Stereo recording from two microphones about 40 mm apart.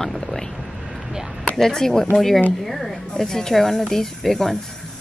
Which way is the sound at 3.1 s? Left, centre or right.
Centre.